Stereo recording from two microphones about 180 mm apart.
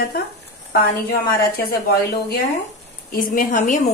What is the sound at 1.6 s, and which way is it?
A woman's voice, 60° left (ahead or behind).